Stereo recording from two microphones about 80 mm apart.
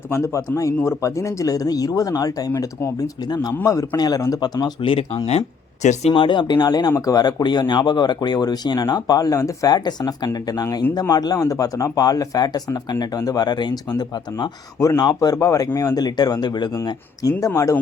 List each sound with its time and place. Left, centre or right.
0.1 s speech: left
6.1 s speech: left
16.8 s speech: left